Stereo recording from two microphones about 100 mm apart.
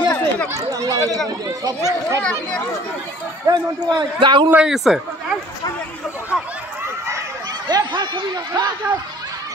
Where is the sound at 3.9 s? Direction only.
50° right (ahead or behind).